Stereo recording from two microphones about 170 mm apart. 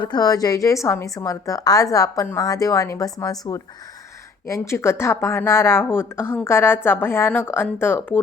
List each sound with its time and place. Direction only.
0.0 s a woman's voice: 25° left (ahead or behind)